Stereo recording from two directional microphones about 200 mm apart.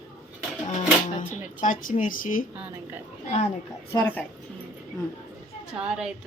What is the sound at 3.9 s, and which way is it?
Music, 20° left (ahead or behind).